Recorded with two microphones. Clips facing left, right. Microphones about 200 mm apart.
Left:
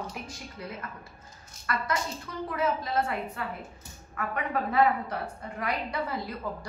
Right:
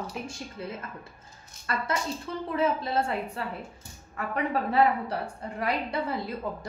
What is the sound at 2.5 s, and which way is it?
A woman's voice, 30° right (ahead or behind).